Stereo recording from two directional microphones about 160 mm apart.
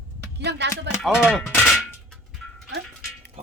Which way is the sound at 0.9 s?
90° right.